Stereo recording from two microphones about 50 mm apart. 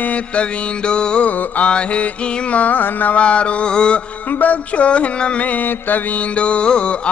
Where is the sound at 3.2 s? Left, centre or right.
Left.